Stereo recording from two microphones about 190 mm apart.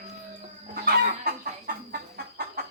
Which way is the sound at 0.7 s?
55° right (ahead or behind).